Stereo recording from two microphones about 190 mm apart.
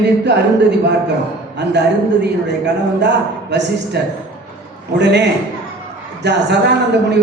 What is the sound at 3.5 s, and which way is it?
A man's voice, 65° right (ahead or behind).